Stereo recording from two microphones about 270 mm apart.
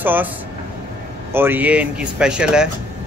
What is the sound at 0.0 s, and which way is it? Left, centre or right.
Speech, centre.